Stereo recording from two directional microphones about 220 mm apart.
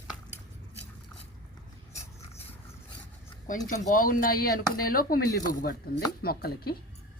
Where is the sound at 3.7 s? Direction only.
40° left (ahead or behind).